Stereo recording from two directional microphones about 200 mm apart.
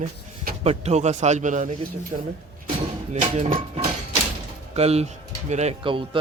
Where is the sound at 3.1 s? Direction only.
35° right (ahead or behind).